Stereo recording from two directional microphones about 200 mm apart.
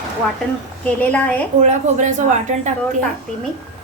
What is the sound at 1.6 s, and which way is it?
Speech, 35° right (ahead or behind).